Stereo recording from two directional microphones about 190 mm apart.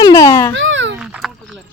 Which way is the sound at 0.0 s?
20° left (ahead or behind).